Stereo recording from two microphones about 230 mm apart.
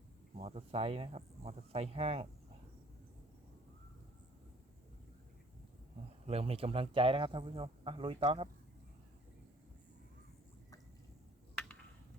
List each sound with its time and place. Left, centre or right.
0.3 s a man's voice: right
6.2 s a man's voice: right